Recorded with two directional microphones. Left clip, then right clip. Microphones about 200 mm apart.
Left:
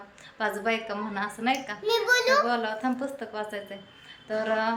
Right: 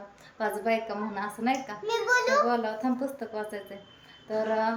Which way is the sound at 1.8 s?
20° left (ahead or behind).